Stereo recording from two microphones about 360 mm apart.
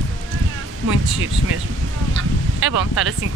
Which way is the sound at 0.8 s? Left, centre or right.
Right.